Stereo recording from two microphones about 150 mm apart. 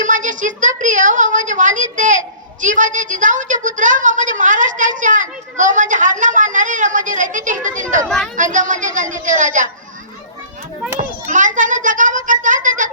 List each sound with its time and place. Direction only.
0.0 s a woman's voice: 60° right (ahead or behind)
8.0 s a woman's voice: centre (ahead or behind)
8.4 s a woman's voice: 60° right (ahead or behind)
11.3 s a sound: 60° right (ahead or behind)